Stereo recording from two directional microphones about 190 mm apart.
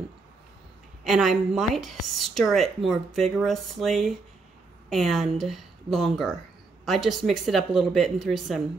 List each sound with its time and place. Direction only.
1.0 s a woman's voice: centre (ahead or behind)